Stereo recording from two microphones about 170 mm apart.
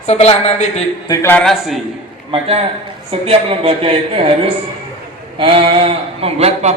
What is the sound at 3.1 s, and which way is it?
A man's voice, 35° right (ahead or behind).